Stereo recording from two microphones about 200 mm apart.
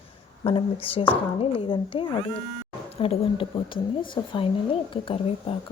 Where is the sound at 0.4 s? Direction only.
25° left (ahead or behind).